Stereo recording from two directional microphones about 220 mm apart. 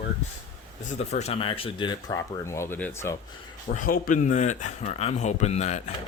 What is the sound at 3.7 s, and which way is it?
Speech, 40° left (ahead or behind).